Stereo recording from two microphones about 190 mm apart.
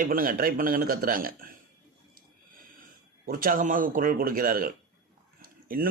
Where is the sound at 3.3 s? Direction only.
50° right (ahead or behind).